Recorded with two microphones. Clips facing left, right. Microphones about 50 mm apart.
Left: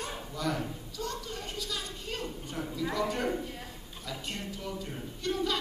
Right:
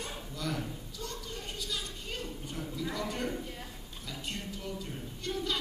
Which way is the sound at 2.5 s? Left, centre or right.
Centre.